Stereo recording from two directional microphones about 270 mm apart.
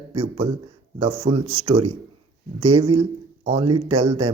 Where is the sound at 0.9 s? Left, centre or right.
Right.